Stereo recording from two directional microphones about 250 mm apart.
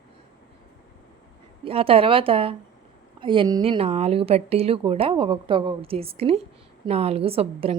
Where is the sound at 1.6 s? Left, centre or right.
Right.